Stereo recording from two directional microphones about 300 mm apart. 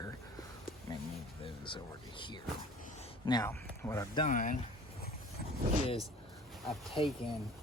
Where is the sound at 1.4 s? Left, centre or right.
Centre.